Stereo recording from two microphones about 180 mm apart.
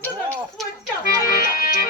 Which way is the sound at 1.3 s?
50° left (ahead or behind).